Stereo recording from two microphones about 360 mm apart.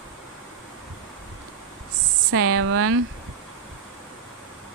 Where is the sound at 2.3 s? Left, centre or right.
Right.